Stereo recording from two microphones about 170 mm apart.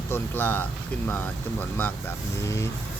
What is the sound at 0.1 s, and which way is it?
Speech, 10° left (ahead or behind).